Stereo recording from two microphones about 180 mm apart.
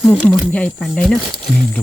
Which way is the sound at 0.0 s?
10° left (ahead or behind).